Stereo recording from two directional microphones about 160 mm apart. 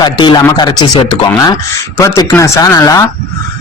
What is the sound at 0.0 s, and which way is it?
Speech, 30° left (ahead or behind).